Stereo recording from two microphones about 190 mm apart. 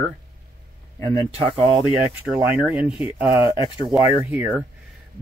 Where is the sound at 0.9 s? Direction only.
15° left (ahead or behind).